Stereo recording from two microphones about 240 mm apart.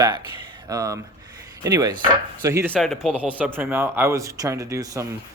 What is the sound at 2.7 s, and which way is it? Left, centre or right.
Speech, centre.